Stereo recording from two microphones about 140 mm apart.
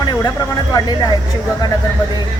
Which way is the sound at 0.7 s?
30° left (ahead or behind).